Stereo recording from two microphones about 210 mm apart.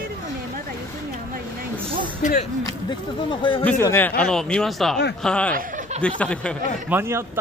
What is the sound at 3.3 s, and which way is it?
Speech, 25° left (ahead or behind).